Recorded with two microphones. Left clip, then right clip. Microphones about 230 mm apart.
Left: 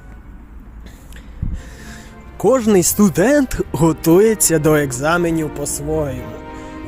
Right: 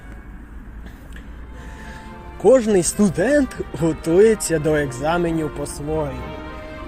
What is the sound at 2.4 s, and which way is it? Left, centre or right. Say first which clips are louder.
Speech: left 1 dB; left.